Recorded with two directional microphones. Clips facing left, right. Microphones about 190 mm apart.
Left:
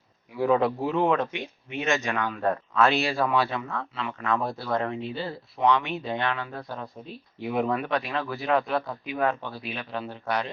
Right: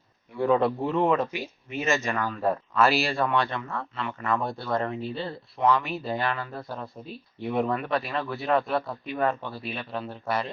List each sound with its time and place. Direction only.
0.3 s speech: 5° left (ahead or behind)